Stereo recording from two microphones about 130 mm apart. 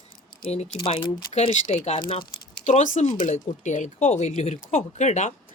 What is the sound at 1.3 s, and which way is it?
Speech, 55° left (ahead or behind).